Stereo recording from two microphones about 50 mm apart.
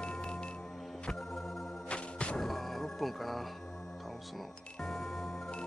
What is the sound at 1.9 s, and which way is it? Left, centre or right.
Music, left.